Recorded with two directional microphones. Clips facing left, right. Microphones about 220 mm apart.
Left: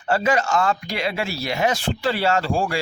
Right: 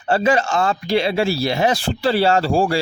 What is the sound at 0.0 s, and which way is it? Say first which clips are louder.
Speech: right 3 dB; 30° right (ahead or behind).